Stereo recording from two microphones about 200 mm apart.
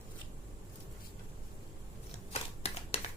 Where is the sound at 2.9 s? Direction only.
30° left (ahead or behind).